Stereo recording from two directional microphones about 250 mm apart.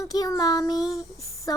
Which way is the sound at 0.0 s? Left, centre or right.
Centre.